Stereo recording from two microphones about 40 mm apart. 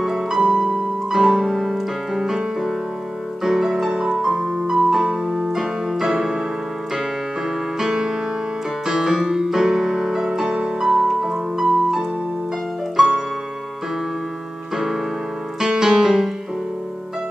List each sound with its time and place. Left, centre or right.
0.0 s music: centre
0.4 s piano: centre
3.4 s music: centre
4.4 s piano: centre
7.8 s music: centre
15.6 s music: centre